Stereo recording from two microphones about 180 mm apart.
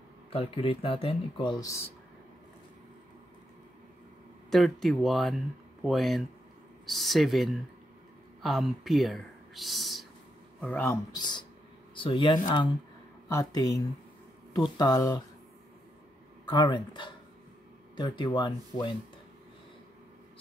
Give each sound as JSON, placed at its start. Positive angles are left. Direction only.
{"t": 0.3, "sound": "speech", "side_deg": 30}
{"t": 4.5, "sound": "speech", "side_deg": 0}
{"t": 11.1, "sound": "speech", "side_deg": 25}
{"t": 16.4, "sound": "speech", "side_deg": 25}